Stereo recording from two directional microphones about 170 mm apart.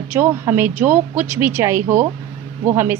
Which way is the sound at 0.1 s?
10° right (ahead or behind).